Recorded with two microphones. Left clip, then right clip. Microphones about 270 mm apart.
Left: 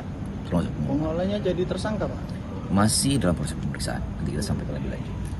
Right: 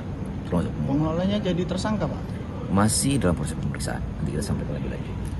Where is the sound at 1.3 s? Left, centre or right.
Right.